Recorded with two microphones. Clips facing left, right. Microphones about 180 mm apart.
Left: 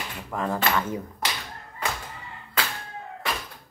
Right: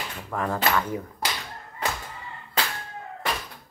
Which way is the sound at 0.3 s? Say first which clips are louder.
Right 1 dB; 15° left (ahead or behind).